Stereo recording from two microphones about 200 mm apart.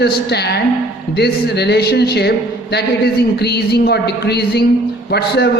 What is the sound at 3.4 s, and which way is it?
A man's voice, 55° left (ahead or behind).